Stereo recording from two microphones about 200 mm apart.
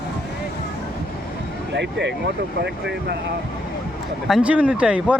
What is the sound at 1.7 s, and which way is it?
Speech, 60° right (ahead or behind).